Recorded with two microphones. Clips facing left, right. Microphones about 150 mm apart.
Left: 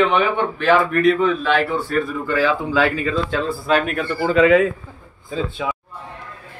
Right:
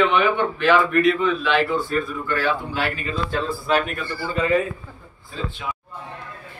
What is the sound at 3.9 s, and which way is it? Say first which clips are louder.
Speech: left 9 dB; 60° left (ahead or behind).